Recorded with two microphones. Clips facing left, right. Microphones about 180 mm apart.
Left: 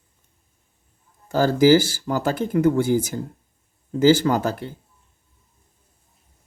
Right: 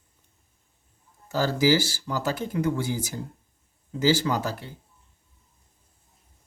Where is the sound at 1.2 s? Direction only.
50° left (ahead or behind).